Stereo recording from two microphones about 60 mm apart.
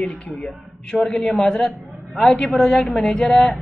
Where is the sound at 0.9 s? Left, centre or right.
Centre.